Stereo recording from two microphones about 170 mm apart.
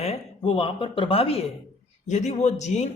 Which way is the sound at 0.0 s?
35° left (ahead or behind).